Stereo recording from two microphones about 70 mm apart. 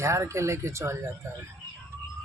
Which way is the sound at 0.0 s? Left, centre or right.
Right.